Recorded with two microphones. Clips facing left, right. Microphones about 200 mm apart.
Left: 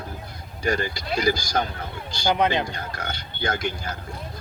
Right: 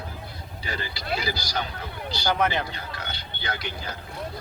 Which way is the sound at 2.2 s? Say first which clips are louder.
Left 3 dB; 15° left (ahead or behind).